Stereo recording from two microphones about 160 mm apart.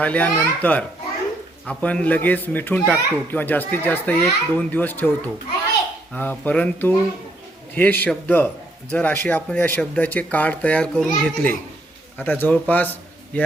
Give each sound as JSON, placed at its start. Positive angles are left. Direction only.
{"t": 0.0, "sound": "a child's voice", "side_deg": 10}